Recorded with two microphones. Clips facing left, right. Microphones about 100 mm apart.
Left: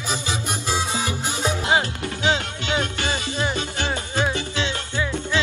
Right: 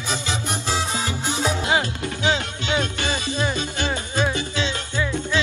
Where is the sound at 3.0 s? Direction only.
20° right (ahead or behind).